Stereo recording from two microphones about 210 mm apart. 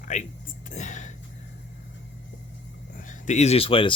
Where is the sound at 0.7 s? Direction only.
35° left (ahead or behind).